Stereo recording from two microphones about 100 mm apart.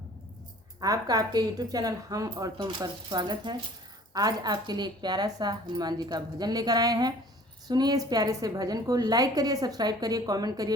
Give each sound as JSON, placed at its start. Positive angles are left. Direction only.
{"t": 0.8, "sound": "a woman's voice", "side_deg": -40}